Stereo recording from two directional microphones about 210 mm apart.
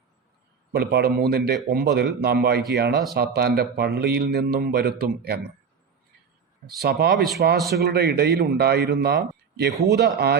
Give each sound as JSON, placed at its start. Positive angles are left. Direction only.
{"t": 0.7, "sound": "speech", "side_deg": -50}
{"t": 6.7, "sound": "speech", "side_deg": -50}